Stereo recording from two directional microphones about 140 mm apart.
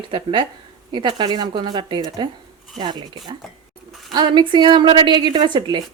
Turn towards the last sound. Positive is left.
turn(degrees=-35)  # may be behind; listen again after turning